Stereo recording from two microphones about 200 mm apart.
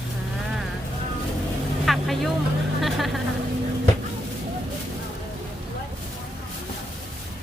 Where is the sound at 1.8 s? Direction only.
Centre (ahead or behind).